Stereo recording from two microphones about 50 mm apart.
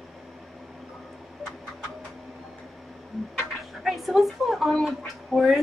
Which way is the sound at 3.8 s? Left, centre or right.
Centre.